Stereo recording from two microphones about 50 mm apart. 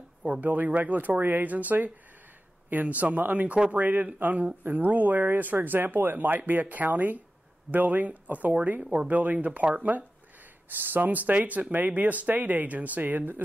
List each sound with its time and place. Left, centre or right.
0.4 s speech: right
3.5 s speech: right
3.8 s speech: right